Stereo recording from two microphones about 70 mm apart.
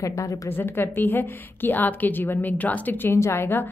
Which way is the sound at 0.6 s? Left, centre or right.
Left.